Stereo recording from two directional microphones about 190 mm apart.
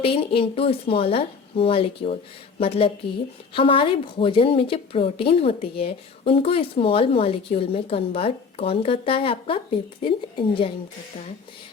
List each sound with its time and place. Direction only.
0.0 s a woman's voice: 30° left (ahead or behind)